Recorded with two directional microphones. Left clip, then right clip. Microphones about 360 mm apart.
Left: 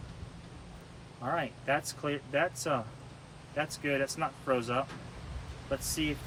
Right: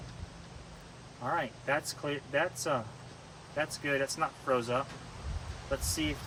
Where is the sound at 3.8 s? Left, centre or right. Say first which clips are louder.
Even; centre.